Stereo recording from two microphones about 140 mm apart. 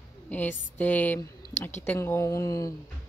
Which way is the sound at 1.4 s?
60° left (ahead or behind).